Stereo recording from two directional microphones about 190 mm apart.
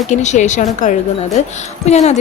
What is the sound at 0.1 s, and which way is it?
Speech, 40° left (ahead or behind).